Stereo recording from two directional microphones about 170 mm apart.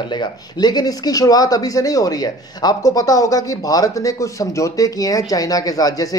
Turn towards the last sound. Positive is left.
turn(degrees=20)  # may be behind; listen again after turning